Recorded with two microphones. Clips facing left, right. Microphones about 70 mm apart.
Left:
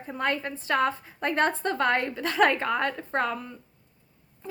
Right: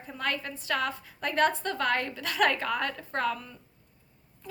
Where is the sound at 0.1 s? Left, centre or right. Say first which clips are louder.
Left 4 dB; left.